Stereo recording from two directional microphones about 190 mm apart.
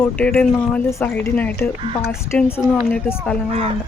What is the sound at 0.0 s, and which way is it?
Speech, 10° left (ahead or behind).